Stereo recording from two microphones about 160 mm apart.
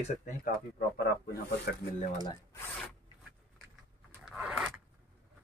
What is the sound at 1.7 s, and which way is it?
Speech, 75° left (ahead or behind).